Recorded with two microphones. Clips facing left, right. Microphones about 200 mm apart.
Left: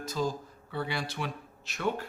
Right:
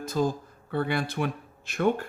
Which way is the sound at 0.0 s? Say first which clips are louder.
Right 5 dB; 55° right (ahead or behind).